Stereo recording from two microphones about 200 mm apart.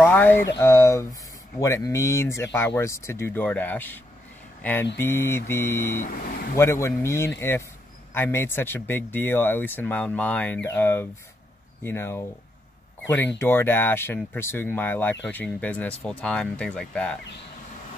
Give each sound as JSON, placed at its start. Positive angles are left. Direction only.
{"t": 0.0, "sound": "a sound", "side_deg": 10}
{"t": 0.6, "sound": "speech", "side_deg": 15}
{"t": 6.0, "sound": "speech", "side_deg": 50}
{"t": 6.5, "sound": "speech", "side_deg": 15}